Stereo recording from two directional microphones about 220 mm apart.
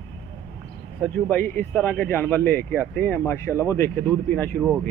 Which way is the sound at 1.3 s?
10° left (ahead or behind).